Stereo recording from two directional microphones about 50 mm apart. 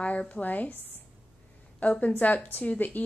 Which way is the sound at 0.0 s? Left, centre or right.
Left.